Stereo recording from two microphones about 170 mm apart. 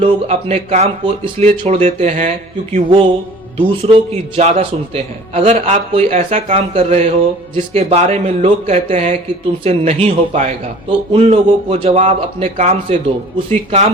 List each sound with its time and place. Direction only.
0.0 s a man's voice: 35° right (ahead or behind)